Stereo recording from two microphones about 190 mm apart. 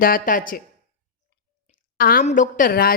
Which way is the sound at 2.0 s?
50° left (ahead or behind).